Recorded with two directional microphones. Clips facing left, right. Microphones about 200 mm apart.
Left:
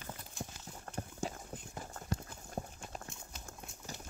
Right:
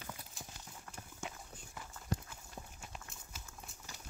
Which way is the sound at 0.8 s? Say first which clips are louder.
Left 8 dB; 45° left (ahead or behind).